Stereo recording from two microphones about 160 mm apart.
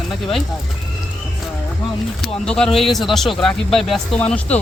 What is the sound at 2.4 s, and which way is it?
Speech, 5° left (ahead or behind).